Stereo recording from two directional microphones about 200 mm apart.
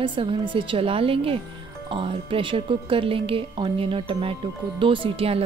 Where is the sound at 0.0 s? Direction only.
25° right (ahead or behind).